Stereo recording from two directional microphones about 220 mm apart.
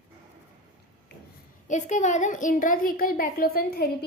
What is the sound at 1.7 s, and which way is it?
A woman's voice, 35° left (ahead or behind).